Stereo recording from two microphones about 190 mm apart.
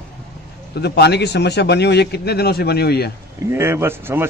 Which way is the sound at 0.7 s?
60° left (ahead or behind).